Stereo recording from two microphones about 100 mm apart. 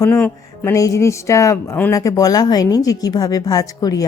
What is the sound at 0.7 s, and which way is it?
Speech, 30° left (ahead or behind).